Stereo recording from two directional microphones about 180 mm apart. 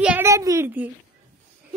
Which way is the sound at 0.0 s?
5° right (ahead or behind).